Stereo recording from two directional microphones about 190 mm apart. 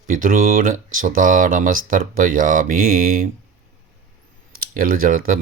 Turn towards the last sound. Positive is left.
turn(degrees=-50)  # may be behind; listen again after turning